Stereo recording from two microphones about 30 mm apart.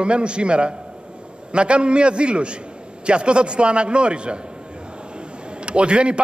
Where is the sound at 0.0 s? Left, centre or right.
Right.